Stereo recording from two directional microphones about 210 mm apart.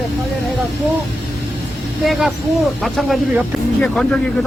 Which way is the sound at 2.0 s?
Centre (ahead or behind).